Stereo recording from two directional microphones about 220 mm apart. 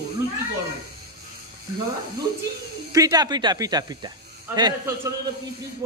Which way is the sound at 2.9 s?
15° right (ahead or behind).